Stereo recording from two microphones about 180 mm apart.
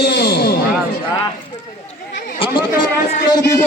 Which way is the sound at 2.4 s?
25° left (ahead or behind).